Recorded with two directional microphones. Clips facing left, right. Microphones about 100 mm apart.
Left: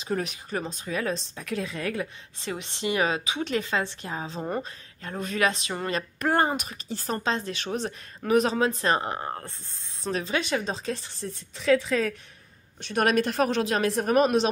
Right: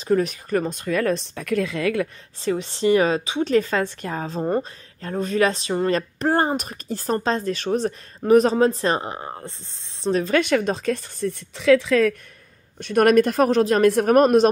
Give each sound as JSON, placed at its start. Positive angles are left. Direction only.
{"t": 0.0, "sound": "speech", "side_deg": -40}
{"t": 2.4, "sound": "speech", "side_deg": -35}
{"t": 4.4, "sound": "speech", "side_deg": -35}
{"t": 9.2, "sound": "speech", "side_deg": -15}
{"t": 10.1, "sound": "speech", "side_deg": -55}
{"t": 12.7, "sound": "speech", "side_deg": -50}
{"t": 13.8, "sound": "speech", "side_deg": -60}